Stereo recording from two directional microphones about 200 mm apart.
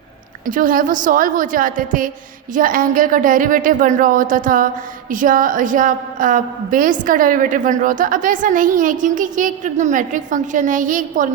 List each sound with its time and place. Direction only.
0.4 s a woman's voice: 45° right (ahead or behind)